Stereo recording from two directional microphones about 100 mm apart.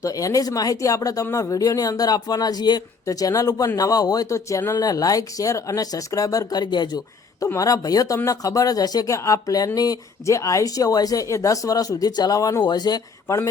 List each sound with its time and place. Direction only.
0.0 s speech: 35° left (ahead or behind)
7.4 s speech: 30° left (ahead or behind)
13.2 s speech: 30° left (ahead or behind)